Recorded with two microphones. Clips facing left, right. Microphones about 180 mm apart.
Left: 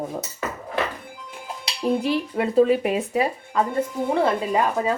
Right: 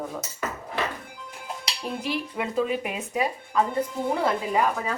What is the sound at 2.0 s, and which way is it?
Speech, 35° left (ahead or behind).